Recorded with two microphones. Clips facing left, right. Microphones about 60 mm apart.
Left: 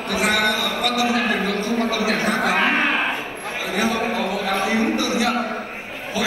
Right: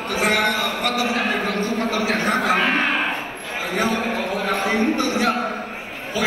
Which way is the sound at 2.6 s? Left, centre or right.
Left.